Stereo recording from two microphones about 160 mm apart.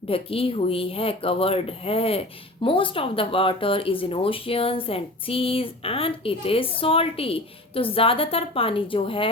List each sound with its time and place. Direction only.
0.1 s speech: 35° left (ahead or behind)